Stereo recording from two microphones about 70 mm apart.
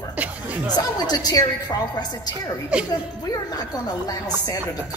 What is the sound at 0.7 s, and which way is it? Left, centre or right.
Speech, left.